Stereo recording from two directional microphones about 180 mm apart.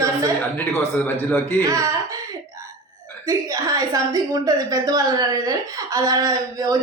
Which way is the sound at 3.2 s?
20° right (ahead or behind).